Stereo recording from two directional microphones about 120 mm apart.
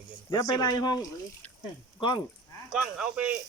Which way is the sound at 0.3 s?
35° left (ahead or behind).